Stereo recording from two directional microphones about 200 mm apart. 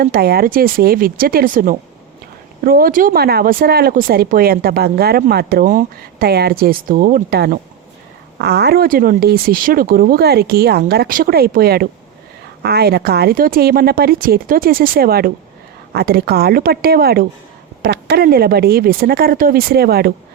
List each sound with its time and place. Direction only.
0.0 s speech: 50° right (ahead or behind)